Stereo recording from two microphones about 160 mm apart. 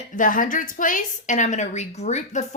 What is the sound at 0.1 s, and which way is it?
A woman's voice, 55° left (ahead or behind).